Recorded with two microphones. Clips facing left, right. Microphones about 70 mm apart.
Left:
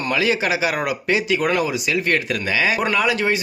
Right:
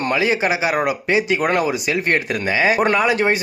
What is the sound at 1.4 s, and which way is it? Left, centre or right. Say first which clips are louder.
Speech: right 2 dB; right.